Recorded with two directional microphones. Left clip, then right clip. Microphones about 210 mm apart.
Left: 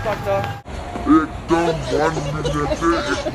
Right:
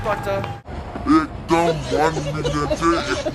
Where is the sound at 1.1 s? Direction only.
30° right (ahead or behind).